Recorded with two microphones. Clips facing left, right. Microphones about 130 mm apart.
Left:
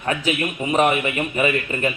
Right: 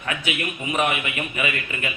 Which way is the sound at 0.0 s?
35° left (ahead or behind).